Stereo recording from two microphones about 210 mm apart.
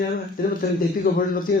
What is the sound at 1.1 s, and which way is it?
Speech, 40° left (ahead or behind).